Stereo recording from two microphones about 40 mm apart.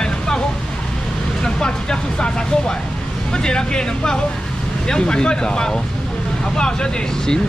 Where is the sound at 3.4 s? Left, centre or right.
Centre.